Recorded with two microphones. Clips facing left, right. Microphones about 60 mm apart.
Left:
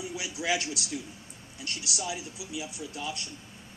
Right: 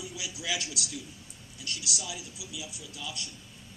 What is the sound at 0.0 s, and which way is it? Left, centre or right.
A man's voice, left.